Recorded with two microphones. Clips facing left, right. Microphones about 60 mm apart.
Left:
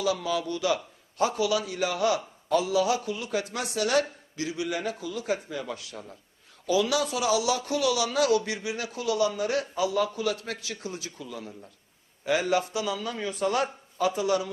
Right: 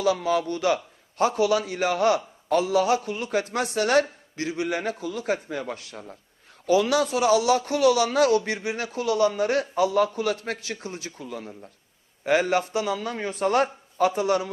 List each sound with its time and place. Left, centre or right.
0.0 s speech: right